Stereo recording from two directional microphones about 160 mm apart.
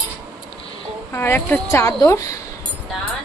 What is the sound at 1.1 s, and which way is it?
Speech, 15° left (ahead or behind).